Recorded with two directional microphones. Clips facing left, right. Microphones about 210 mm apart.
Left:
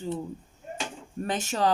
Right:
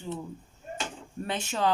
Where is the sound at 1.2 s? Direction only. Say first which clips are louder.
Left 2 dB; 45° left (ahead or behind).